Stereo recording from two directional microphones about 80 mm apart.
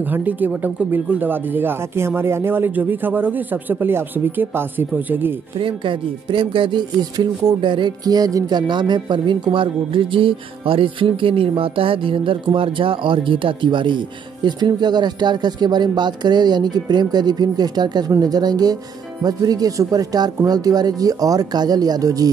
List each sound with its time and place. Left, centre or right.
0.1 s speech: right
5.6 s speech: right
7.6 s music: right
8.0 s speech: right